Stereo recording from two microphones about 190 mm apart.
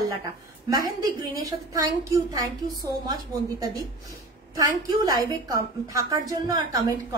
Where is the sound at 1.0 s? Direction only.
20° right (ahead or behind).